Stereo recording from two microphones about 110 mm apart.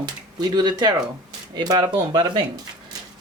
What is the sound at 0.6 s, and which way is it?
Speech, 40° right (ahead or behind).